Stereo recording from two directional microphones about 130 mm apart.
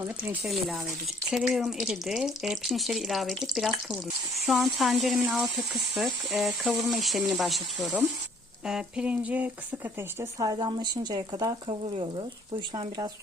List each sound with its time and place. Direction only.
0.3 s speech: centre (ahead or behind)
10.3 s speech: 30° right (ahead or behind)
11.7 s speech: 40° right (ahead or behind)